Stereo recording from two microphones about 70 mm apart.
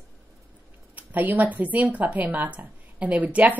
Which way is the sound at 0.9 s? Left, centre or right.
Right.